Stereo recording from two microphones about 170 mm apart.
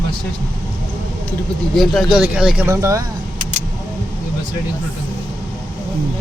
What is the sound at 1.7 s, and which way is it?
Speech, centre (ahead or behind).